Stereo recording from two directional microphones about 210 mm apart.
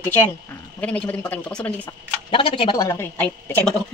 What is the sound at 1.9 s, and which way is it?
Speech, 25° left (ahead or behind).